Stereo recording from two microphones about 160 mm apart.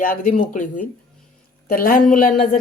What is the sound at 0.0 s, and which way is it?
Speech, 60° left (ahead or behind).